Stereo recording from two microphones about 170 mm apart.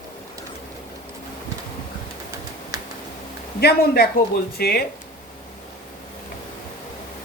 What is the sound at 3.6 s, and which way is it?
Speech, 65° left (ahead or behind).